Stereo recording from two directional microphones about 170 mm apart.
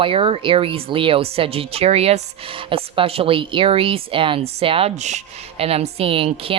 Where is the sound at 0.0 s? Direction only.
30° right (ahead or behind).